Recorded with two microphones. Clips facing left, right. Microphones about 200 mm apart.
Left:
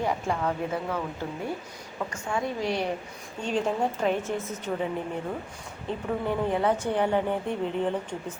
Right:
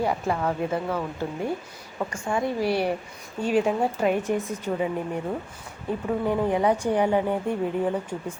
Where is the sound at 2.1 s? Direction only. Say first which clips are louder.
Right 4 dB; 10° right (ahead or behind).